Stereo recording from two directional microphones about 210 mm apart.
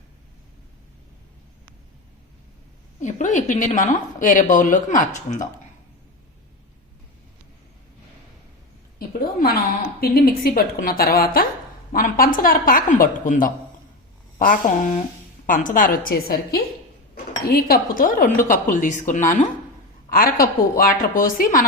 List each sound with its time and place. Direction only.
3.0 s a woman's voice: 35° left (ahead or behind)
9.0 s a sound: 45° left (ahead or behind)
10.0 s a woman's voice: 45° left (ahead or behind)